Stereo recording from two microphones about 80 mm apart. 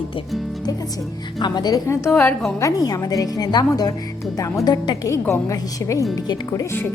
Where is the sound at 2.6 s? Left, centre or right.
Left.